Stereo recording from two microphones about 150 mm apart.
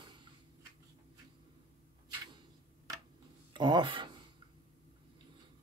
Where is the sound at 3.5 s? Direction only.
30° right (ahead or behind).